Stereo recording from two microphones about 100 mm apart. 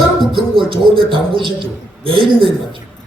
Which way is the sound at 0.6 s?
60° right (ahead or behind).